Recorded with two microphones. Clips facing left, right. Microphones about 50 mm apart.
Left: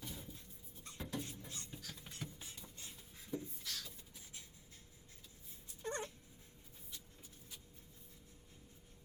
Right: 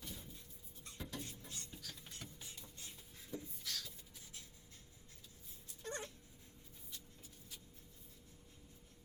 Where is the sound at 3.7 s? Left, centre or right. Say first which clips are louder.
Right 1 dB; centre.